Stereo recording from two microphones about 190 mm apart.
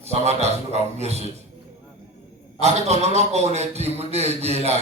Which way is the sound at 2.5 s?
35° right (ahead or behind).